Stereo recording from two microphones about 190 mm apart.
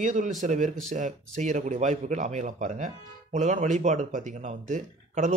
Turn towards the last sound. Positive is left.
turn(degrees=-40)  # may be behind; listen again after turning